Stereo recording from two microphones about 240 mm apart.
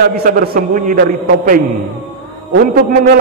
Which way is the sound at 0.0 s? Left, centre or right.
Right.